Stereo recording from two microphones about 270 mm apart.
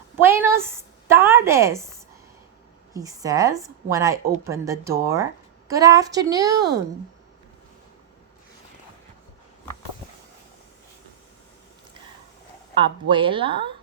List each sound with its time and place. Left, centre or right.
0.2 s a sound: centre
2.9 s a woman's voice: centre
12.7 s speech: centre